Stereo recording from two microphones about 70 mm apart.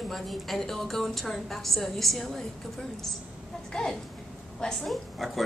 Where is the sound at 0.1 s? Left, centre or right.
Centre.